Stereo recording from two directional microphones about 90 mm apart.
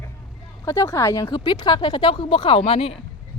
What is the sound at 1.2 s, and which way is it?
A woman's voice, 60° left (ahead or behind).